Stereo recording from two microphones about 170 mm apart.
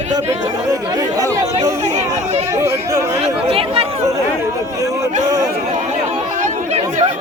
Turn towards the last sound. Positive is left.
turn(degrees=-45)  # may be behind; listen again after turning